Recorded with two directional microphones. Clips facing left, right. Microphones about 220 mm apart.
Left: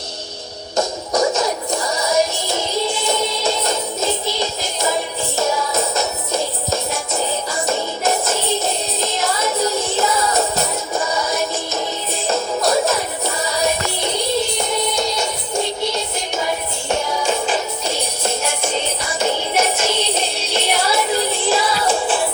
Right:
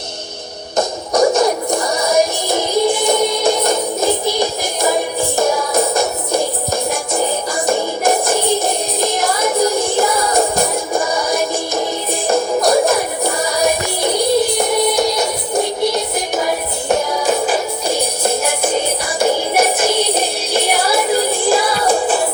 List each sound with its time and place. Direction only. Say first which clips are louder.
1.2 s music: right 7 dB; 35° right (ahead or behind)
2.1 s music: right 4 dB; 15° right (ahead or behind)
6.3 s music: right 3 dB; 15° right (ahead or behind)
8.4 s music: right 4 dB; 15° right (ahead or behind)
10.9 s music: right 3 dB; 35° right (ahead or behind)
11.3 s music: right 4 dB; 15° right (ahead or behind)
17.4 s music: right 4 dB; 10° right (ahead or behind)